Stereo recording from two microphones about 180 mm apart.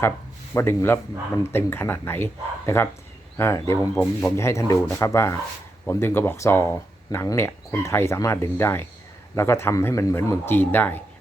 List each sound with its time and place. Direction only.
0.5 s speech: 15° left (ahead or behind)